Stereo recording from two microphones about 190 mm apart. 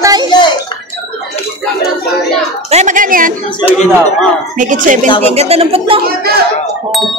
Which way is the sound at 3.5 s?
30° left (ahead or behind).